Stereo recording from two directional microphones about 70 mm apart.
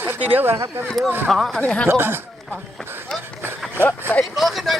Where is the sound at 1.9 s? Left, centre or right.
Right.